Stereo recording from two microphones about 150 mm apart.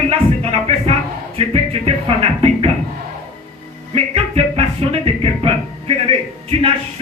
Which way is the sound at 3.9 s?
40° right (ahead or behind).